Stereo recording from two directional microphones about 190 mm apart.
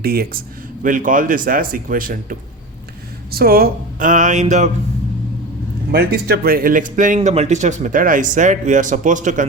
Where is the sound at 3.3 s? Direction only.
55° right (ahead or behind).